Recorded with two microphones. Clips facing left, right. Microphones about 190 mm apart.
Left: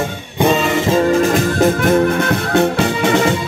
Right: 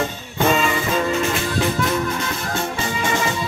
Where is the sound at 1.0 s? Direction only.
35° left (ahead or behind).